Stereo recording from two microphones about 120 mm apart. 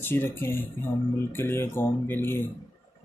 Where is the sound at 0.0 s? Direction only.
20° left (ahead or behind).